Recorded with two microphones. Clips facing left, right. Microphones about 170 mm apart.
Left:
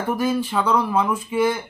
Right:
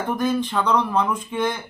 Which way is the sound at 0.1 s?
5° left (ahead or behind).